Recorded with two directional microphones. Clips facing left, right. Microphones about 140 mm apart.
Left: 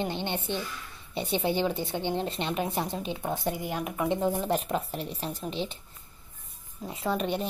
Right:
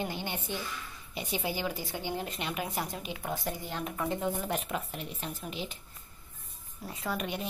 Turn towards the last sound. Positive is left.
turn(degrees=30)  # may be behind; listen again after turning